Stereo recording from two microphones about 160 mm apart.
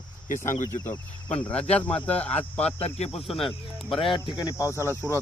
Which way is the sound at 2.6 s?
40° left (ahead or behind).